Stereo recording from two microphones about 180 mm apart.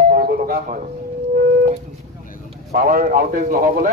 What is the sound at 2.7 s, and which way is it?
Speech, 50° right (ahead or behind).